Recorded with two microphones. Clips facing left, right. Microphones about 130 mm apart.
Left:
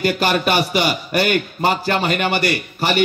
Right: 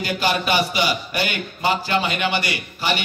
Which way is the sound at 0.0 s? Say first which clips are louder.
Left 4 dB; 50° left (ahead or behind).